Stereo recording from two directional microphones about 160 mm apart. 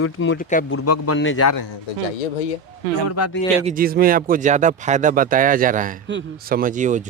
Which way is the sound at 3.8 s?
65° right (ahead or behind).